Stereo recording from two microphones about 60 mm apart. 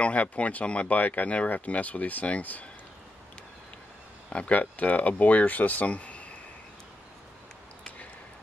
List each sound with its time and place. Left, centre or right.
0.0 s speech: left
4.3 s speech: left